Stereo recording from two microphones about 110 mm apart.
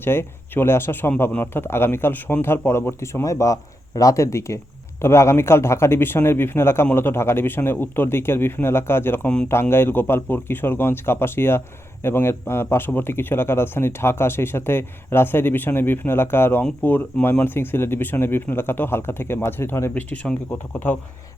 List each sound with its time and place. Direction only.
0.0 s a man's voice: 20° left (ahead or behind)